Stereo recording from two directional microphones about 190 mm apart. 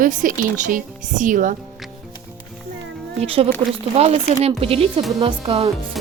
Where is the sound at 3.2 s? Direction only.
30° right (ahead or behind).